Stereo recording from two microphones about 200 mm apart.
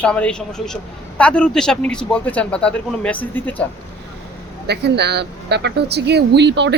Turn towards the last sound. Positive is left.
turn(degrees=-60)  # may be behind; listen again after turning